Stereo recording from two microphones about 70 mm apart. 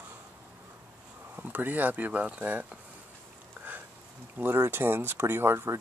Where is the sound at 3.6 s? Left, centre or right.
Right.